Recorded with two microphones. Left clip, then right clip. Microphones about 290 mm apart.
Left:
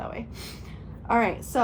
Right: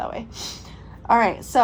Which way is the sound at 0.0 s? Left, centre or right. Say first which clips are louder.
Right 6 dB; right.